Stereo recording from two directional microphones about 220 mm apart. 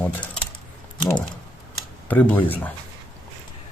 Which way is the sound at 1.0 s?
5° left (ahead or behind).